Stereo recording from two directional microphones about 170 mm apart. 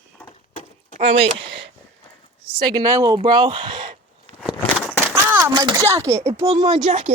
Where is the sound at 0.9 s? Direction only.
35° right (ahead or behind).